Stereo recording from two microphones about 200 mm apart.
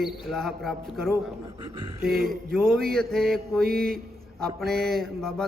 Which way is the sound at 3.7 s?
50° right (ahead or behind).